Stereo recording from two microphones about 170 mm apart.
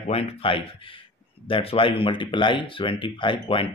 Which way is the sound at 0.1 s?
35° left (ahead or behind).